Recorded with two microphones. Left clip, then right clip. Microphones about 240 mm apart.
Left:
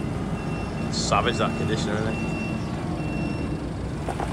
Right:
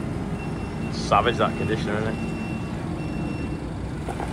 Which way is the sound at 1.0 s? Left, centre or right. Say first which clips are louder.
Right 3 dB; centre.